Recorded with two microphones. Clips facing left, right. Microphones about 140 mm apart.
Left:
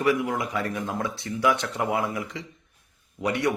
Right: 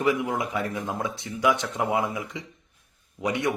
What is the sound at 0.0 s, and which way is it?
A man's voice, 20° right (ahead or behind).